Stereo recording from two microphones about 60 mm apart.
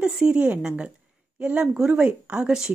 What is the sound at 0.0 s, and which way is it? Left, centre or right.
A woman's voice, centre.